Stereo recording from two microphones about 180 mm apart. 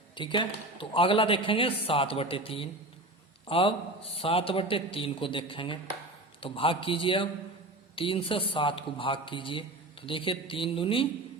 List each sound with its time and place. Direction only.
0.2 s a man's voice: 25° left (ahead or behind)